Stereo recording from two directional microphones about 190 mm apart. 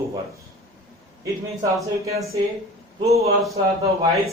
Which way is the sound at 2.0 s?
15° right (ahead or behind).